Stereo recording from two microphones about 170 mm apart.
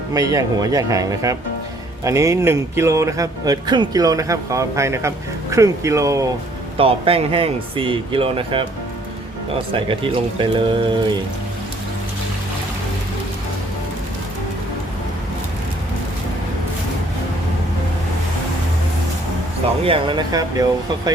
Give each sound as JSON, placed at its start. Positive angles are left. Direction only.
{"t": 0.1, "sound": "speech", "side_deg": -20}
{"t": 6.7, "sound": "speech", "side_deg": -35}
{"t": 9.9, "sound": "speech", "side_deg": -30}
{"t": 19.8, "sound": "speech", "side_deg": -30}